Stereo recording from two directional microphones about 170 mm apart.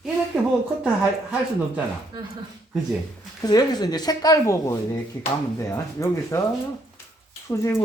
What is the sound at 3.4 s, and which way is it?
Speech, 25° left (ahead or behind).